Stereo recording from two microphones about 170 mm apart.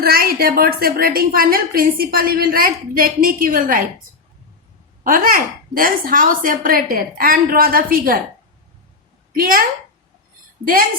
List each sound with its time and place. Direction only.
0.0 s a woman's voice: 60° right (ahead or behind)
5.0 s a woman's voice: 55° right (ahead or behind)
9.3 s a woman's voice: 55° right (ahead or behind)